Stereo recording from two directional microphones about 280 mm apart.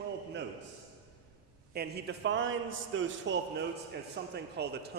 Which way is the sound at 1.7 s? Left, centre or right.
Right.